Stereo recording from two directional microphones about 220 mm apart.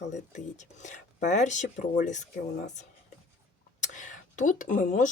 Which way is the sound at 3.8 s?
35° left (ahead or behind).